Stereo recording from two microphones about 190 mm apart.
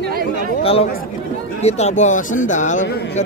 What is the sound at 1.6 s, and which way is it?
Speech, 35° left (ahead or behind).